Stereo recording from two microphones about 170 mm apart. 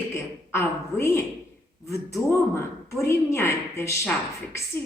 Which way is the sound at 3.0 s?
15° left (ahead or behind).